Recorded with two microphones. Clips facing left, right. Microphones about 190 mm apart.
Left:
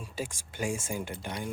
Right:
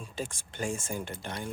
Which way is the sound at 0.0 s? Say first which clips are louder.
Even; 10° left (ahead or behind).